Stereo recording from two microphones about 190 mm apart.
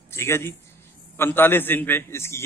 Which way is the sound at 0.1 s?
15° left (ahead or behind).